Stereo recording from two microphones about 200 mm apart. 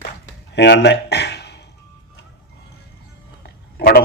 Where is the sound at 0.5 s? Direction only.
60° left (ahead or behind).